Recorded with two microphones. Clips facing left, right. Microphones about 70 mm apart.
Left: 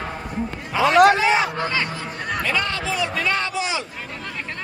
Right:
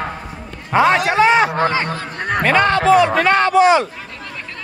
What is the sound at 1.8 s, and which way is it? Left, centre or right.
A man's voice, right.